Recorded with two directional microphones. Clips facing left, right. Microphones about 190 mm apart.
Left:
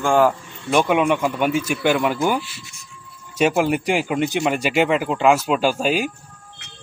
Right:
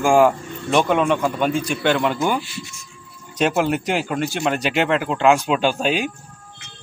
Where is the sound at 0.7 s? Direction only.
10° left (ahead or behind).